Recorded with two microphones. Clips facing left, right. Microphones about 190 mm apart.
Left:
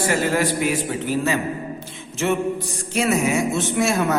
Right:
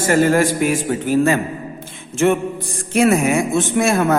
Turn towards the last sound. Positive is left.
turn(degrees=-50)  # may be behind; listen again after turning